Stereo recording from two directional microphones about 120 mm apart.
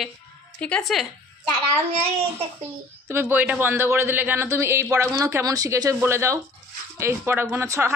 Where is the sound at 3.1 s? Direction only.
15° right (ahead or behind).